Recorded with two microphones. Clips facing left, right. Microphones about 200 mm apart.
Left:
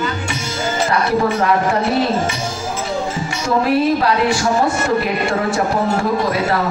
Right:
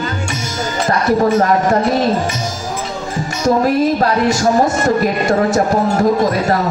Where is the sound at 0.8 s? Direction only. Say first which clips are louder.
Right 4 dB; 40° right (ahead or behind).